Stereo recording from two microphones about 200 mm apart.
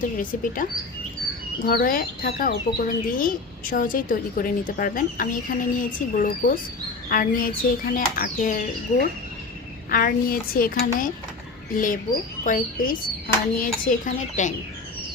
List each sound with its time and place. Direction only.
0.0 s speech: 45° left (ahead or behind)
9.9 s speech: 45° left (ahead or behind)
12.5 s a child's voice: 45° left (ahead or behind)